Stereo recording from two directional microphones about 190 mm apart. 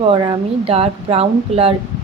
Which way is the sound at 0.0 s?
30° right (ahead or behind).